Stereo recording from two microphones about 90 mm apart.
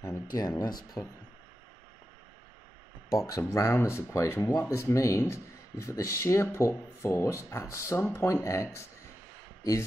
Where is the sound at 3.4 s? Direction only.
30° left (ahead or behind).